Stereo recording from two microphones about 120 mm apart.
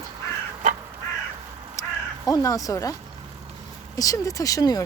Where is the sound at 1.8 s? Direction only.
25° left (ahead or behind).